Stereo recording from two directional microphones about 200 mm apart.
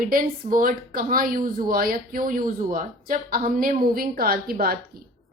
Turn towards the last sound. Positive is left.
turn(degrees=-50)  # may be behind; listen again after turning